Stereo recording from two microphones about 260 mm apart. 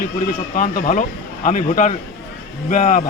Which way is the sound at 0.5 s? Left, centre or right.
Left.